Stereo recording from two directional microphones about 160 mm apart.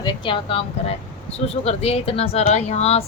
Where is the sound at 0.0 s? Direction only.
35° left (ahead or behind).